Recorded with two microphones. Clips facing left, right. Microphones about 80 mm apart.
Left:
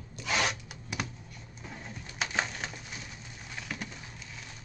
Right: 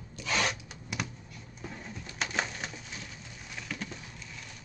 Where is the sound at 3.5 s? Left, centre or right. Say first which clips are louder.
Even; centre.